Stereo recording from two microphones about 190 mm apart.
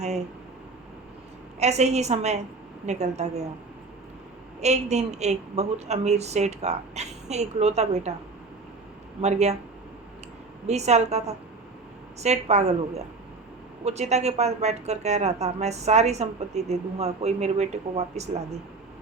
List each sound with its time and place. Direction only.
1.5 s a woman's voice: 35° right (ahead or behind)
4.6 s a woman's voice: 35° right (ahead or behind)
9.2 s a woman's voice: 35° right (ahead or behind)
10.7 s a woman's voice: 35° right (ahead or behind)